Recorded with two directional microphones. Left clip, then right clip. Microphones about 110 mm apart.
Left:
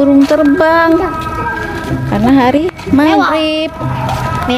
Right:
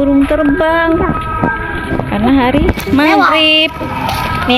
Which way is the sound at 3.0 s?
25° right (ahead or behind).